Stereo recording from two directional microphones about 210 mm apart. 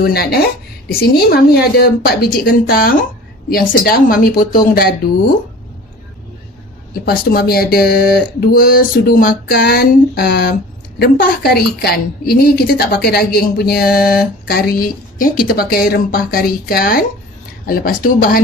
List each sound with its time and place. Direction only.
0.0 s speech: 45° left (ahead or behind)
6.9 s speech: 45° left (ahead or behind)